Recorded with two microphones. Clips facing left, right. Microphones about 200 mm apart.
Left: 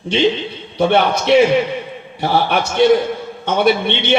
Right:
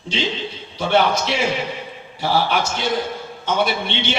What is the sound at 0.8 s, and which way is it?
A man's voice, 60° left (ahead or behind).